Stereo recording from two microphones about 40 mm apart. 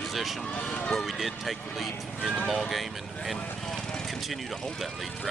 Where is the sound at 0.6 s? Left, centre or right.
Left.